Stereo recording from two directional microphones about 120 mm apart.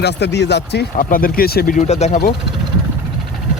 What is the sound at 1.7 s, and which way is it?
Speech, 70° left (ahead or behind).